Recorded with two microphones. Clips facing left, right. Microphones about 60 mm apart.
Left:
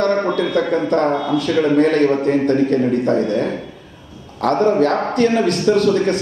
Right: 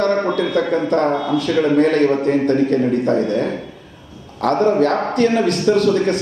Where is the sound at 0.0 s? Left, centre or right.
Centre.